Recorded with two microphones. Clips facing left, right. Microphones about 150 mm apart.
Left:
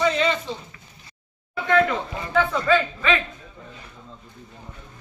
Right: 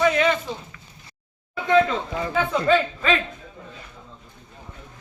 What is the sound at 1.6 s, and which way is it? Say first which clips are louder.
Speech: right 1 dB; 20° right (ahead or behind).